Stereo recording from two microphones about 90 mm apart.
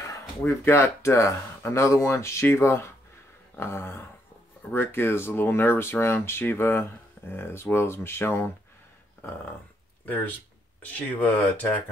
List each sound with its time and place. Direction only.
0.5 s speech: 30° left (ahead or behind)
10.9 s speech: 15° left (ahead or behind)